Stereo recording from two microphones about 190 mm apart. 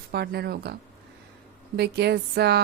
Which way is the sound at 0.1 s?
55° right (ahead or behind).